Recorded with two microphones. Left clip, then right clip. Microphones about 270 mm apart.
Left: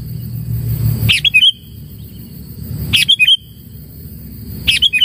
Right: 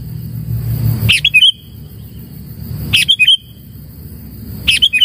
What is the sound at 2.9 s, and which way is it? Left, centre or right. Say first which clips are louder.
Bird: right 1 dB; centre.